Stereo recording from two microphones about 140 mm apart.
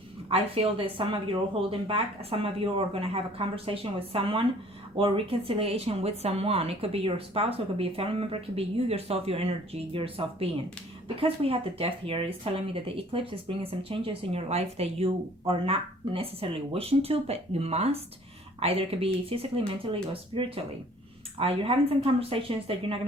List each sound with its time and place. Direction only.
0.3 s speech: 45° right (ahead or behind)